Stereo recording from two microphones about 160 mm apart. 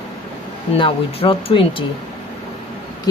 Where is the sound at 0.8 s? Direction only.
35° left (ahead or behind).